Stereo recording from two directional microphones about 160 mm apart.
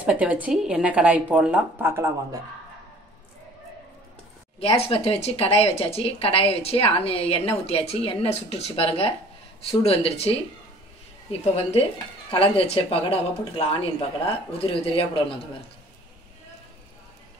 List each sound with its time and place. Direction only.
0.0 s speech: 10° right (ahead or behind)
4.6 s speech: 40° left (ahead or behind)
11.5 s speech: 35° left (ahead or behind)